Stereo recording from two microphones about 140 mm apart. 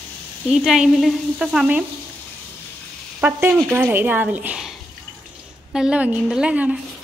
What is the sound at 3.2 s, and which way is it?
Speech, 15° right (ahead or behind).